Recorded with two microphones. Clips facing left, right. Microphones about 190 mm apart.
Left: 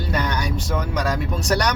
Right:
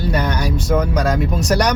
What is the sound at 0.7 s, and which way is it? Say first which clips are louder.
Speech: right 7 dB; 45° right (ahead or behind).